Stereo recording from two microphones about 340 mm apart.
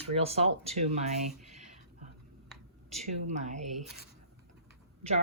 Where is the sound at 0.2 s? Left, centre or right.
Centre.